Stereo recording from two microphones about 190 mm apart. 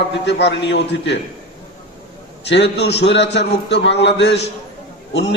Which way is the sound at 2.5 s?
65° left (ahead or behind).